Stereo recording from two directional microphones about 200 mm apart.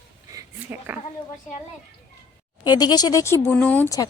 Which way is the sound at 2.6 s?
20° left (ahead or behind).